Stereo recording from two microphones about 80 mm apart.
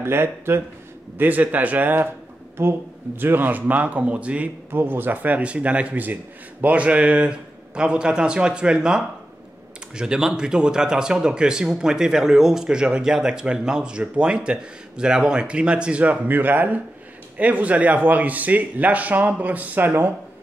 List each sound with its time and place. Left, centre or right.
0.0 s a man's voice: right